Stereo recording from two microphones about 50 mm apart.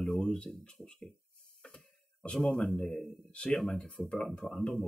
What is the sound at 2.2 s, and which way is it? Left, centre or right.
Speech, centre.